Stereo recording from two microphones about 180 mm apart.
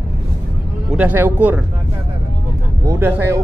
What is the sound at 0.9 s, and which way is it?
Speech, 10° right (ahead or behind).